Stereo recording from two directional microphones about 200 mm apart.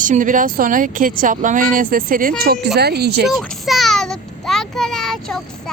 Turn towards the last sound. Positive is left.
turn(degrees=0)  # may be behind; listen again after turning